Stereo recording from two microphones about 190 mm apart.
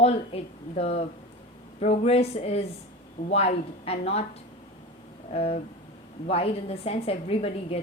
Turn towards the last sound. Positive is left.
turn(degrees=30)  # may be behind; listen again after turning